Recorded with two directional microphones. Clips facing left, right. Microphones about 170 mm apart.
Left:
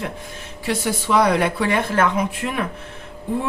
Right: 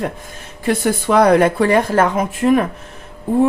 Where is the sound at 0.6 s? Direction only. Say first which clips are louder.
Right 6 dB; 55° right (ahead or behind).